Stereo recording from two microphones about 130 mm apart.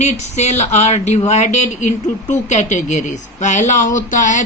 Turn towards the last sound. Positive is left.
turn(degrees=75)  # may be behind; listen again after turning